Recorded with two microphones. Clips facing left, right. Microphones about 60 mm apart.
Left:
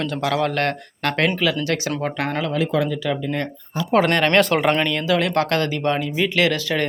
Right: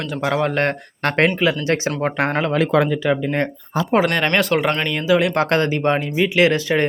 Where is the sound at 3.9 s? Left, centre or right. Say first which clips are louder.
Left 1 dB; centre.